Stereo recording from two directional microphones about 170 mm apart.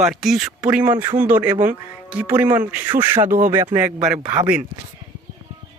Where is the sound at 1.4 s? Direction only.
25° right (ahead or behind).